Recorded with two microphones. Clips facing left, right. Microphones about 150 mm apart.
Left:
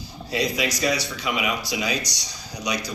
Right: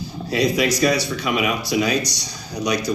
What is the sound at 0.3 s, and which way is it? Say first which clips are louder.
Speech: right 6 dB; 60° right (ahead or behind).